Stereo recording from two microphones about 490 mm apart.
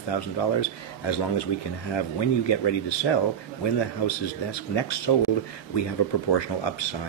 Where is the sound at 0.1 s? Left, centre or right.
Left.